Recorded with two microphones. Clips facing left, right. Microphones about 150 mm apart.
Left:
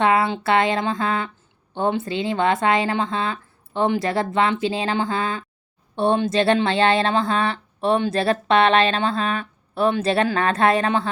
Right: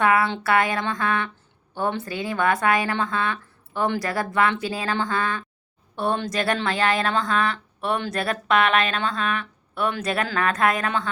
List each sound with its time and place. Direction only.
0.0 s speech: 25° left (ahead or behind)